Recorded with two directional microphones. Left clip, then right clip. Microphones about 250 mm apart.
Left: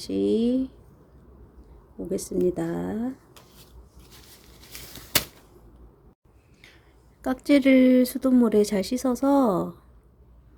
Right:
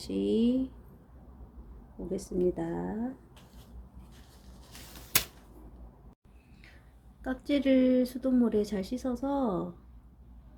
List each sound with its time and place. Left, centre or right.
0.0 s speech: centre
2.0 s speech: left
7.2 s speech: left